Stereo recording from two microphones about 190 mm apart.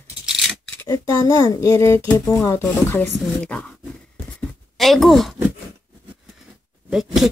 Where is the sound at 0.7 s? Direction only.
20° left (ahead or behind).